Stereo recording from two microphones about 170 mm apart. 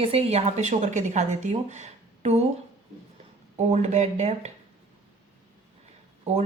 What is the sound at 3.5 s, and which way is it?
A woman's voice, 40° right (ahead or behind).